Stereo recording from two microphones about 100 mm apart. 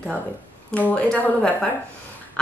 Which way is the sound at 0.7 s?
15° left (ahead or behind).